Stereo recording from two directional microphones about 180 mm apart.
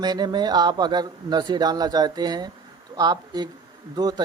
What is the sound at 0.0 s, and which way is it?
Speech, 25° right (ahead or behind).